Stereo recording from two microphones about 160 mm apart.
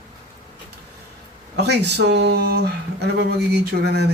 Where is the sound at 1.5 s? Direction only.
90° right.